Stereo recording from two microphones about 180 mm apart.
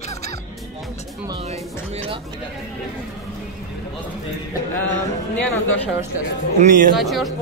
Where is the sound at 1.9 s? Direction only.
30° right (ahead or behind).